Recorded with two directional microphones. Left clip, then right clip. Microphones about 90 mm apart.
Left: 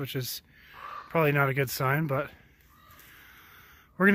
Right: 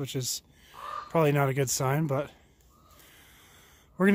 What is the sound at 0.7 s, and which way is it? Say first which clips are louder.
Speech: right 1 dB; 45° right (ahead or behind).